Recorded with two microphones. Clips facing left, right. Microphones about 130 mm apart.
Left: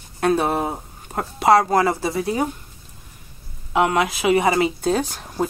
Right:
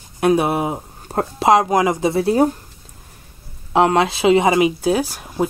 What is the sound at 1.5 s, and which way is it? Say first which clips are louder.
Speech: right 1 dB; 15° right (ahead or behind).